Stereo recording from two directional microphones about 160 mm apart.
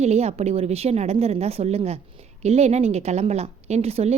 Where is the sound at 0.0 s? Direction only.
45° right (ahead or behind).